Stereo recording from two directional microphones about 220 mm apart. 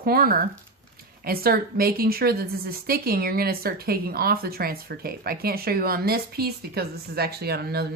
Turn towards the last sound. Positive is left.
turn(degrees=-45)  # may be behind; listen again after turning